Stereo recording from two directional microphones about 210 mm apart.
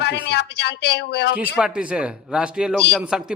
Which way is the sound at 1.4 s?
5° right (ahead or behind).